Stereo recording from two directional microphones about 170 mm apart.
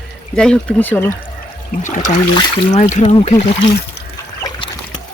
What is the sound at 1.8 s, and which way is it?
Speech, 45° left (ahead or behind).